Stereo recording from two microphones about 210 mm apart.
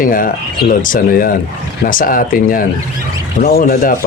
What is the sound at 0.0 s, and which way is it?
Speech, 40° left (ahead or behind).